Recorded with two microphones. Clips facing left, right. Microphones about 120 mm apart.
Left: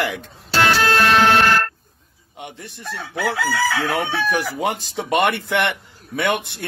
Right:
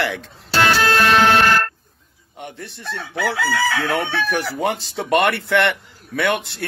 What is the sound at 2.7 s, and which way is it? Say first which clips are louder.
Chicken: right 1 dB; 10° left (ahead or behind).